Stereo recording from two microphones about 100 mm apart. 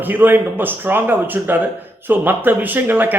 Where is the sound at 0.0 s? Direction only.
20° right (ahead or behind).